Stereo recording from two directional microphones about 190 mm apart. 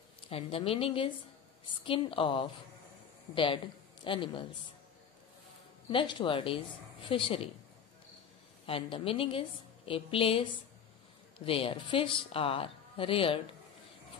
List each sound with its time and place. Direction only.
0.3 s a woman's voice: 30° left (ahead or behind)
4.0 s a woman's voice: 25° left (ahead or behind)
5.9 s a woman's voice: 25° left (ahead or behind)
8.6 s a woman's voice: 30° left (ahead or behind)